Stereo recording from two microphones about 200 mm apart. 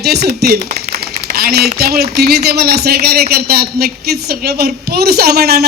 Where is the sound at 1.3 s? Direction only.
50° right (ahead or behind).